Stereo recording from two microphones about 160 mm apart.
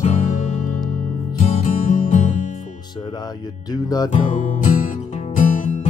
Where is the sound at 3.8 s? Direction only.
25° left (ahead or behind).